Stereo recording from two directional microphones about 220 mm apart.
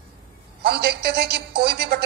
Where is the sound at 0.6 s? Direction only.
45° right (ahead or behind).